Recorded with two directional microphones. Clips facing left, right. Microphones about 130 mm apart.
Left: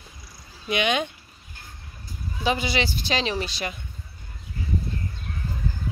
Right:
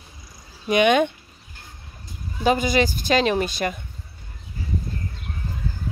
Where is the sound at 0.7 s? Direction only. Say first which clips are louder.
Right 7 dB; 50° right (ahead or behind).